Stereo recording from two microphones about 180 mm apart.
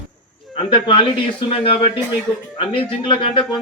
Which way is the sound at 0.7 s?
25° left (ahead or behind).